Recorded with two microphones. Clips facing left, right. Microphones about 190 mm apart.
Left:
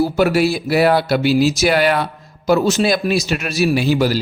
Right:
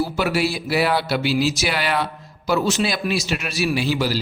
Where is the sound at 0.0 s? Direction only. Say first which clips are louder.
Left 6 dB; 45° left (ahead or behind).